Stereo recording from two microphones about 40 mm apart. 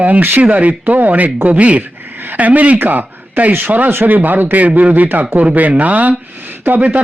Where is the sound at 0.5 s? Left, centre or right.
Right.